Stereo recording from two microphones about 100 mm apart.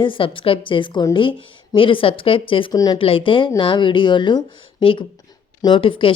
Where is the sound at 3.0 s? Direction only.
65° left (ahead or behind).